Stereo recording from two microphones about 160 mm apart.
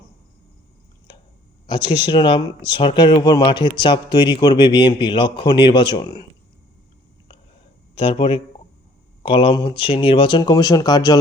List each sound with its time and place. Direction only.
1.7 s speech: 30° left (ahead or behind)
7.9 s speech: 35° left (ahead or behind)